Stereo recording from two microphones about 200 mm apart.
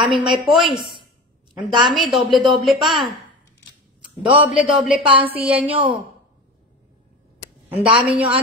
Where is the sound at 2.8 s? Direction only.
Centre (ahead or behind).